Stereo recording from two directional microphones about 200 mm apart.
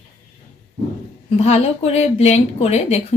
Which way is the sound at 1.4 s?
30° left (ahead or behind).